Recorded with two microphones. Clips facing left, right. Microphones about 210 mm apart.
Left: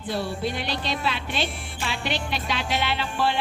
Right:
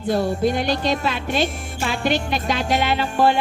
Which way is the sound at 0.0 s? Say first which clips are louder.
Right 8 dB; 45° right (ahead or behind).